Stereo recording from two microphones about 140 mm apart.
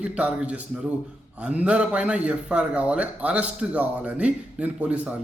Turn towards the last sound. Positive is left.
turn(degrees=-10)  # may be behind; listen again after turning